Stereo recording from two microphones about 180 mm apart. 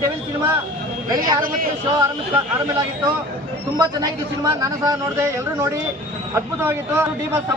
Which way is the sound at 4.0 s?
20° right (ahead or behind).